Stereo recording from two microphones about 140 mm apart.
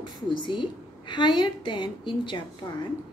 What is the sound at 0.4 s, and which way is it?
A woman's voice, 35° left (ahead or behind).